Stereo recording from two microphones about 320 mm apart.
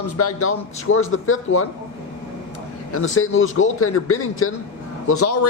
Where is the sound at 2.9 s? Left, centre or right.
Left.